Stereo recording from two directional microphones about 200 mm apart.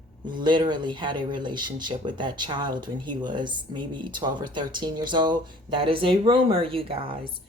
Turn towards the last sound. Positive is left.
turn(degrees=-25)  # may be behind; listen again after turning